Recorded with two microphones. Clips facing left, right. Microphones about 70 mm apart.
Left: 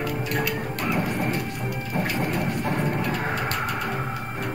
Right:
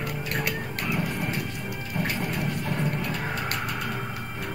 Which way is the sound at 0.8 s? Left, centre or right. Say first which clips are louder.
Left 4 dB; left.